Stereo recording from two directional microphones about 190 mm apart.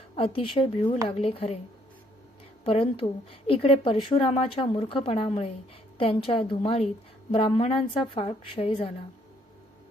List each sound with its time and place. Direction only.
0.2 s a woman's voice: 30° left (ahead or behind)
2.6 s a woman's voice: 30° left (ahead or behind)